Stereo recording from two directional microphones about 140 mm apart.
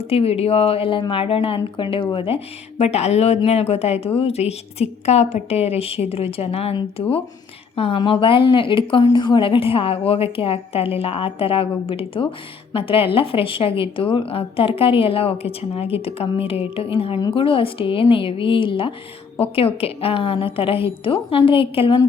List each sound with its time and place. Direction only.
0.1 s a woman's voice: 45° left (ahead or behind)